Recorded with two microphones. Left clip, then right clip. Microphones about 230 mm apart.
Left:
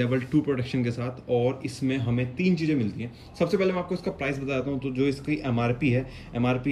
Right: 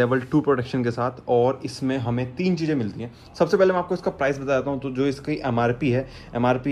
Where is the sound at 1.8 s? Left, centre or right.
Right.